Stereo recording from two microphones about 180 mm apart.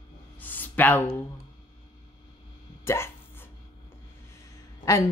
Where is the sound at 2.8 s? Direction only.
15° left (ahead or behind).